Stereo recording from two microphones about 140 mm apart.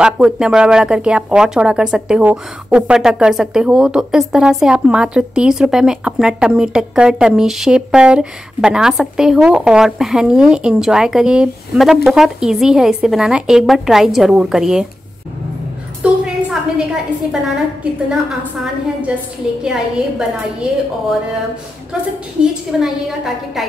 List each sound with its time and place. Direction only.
0.0 s speech: 5° right (ahead or behind)
16.0 s a woman's voice: 5° right (ahead or behind)
19.6 s speech: 5° right (ahead or behind)
21.9 s speech: centre (ahead or behind)